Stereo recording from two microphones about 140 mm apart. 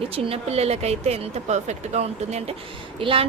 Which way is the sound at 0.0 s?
45° right (ahead or behind).